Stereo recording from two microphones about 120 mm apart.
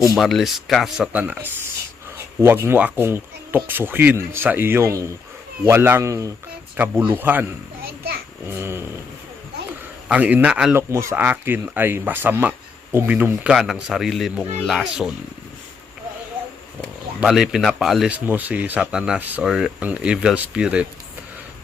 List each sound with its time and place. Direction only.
0.2 s speech: centre (ahead or behind); by 7.4 s 15° right (ahead or behind)
8.4 s speech: 20° right (ahead or behind)
10.1 s speech: 10° right (ahead or behind)
10.8 s speech: 20° right (ahead or behind); by 15.1 s 5° right (ahead or behind)
17.2 s speech: 5° right (ahead or behind)
18.3 s speech: 15° right (ahead or behind)